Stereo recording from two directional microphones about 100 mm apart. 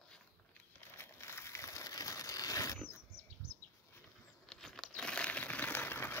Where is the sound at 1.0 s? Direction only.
25° left (ahead or behind).